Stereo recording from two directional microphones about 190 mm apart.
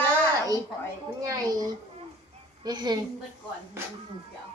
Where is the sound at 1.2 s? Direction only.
20° right (ahead or behind).